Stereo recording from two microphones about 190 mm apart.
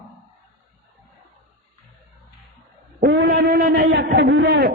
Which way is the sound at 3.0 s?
55° right (ahead or behind).